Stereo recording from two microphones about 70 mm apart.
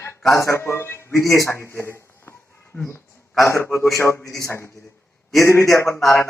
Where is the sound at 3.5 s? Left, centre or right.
Left.